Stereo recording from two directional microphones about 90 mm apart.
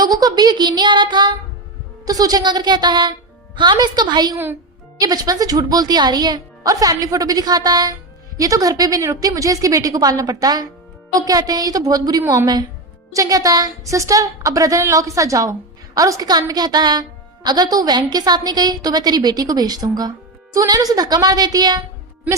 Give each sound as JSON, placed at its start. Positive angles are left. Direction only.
{"t": 0.0, "sound": "a woman's voice", "side_deg": -45}
{"t": 2.0, "sound": "a woman's voice", "side_deg": -45}